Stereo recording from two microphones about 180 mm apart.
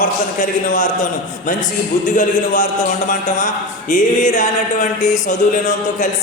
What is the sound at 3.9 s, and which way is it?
A man's voice, 45° left (ahead or behind).